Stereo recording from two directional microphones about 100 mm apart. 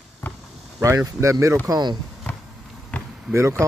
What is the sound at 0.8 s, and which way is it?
Speech, 30° right (ahead or behind).